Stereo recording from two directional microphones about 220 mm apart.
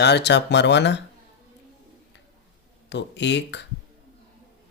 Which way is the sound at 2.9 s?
55° left (ahead or behind).